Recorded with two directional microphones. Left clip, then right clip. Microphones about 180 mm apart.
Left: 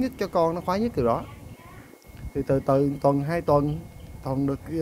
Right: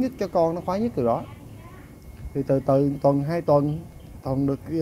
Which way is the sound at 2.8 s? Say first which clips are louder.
Right 1 dB; 30° left (ahead or behind).